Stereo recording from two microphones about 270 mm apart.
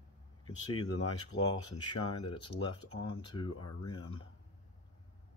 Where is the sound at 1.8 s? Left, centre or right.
Centre.